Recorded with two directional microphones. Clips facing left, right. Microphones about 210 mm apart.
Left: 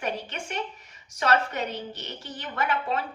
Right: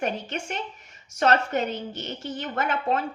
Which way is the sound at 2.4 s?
45° right (ahead or behind).